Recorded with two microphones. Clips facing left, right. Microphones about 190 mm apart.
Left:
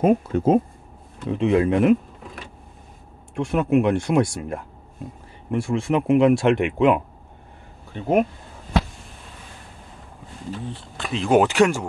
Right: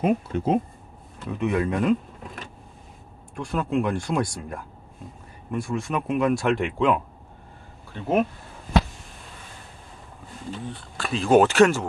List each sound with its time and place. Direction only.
0.0 s speech: 45° left (ahead or behind)
1.3 s speech: 25° left (ahead or behind)
3.3 s speech: 20° left (ahead or behind)
10.7 s speech: 20° left (ahead or behind)